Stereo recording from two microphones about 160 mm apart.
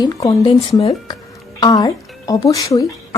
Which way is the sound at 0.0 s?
25° left (ahead or behind).